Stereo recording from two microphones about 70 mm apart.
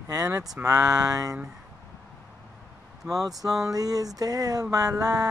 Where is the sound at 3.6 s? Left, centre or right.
Right.